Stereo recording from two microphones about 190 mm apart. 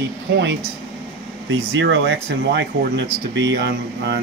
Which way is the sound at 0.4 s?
70° right (ahead or behind).